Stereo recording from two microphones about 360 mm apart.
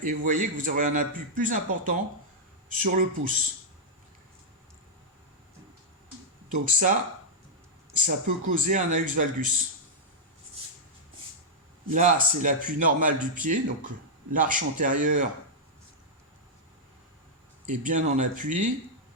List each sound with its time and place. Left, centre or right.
0.0 s speech: right
6.5 s speech: right
7.9 s speech: right
11.9 s speech: right
17.7 s speech: right